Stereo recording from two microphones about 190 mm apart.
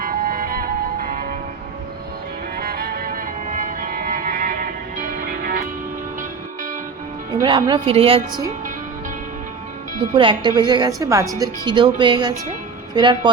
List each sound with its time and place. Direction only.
0.0 s music: 50° right (ahead or behind)
2.6 s violin: 55° right (ahead or behind)
7.4 s a woman's voice: 25° right (ahead or behind)
10.2 s a woman's voice: 25° right (ahead or behind)